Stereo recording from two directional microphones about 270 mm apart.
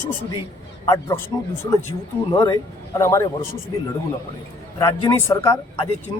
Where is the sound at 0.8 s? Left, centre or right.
Centre.